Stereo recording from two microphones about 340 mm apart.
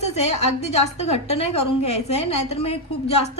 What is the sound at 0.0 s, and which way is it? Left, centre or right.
A woman's voice, centre.